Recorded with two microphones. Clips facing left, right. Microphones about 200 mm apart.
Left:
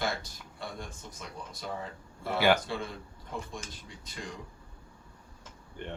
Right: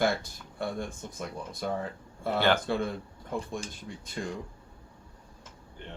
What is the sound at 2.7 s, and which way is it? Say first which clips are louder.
Speech: right 6 dB; 55° right (ahead or behind).